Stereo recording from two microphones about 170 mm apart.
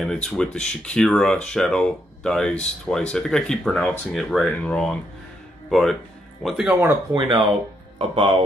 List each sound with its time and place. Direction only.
0.0 s speech: 5° left (ahead or behind)
7.2 s speech: 30° right (ahead or behind)